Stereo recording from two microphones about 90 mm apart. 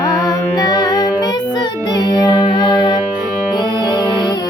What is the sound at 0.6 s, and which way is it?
Music, 45° left (ahead or behind).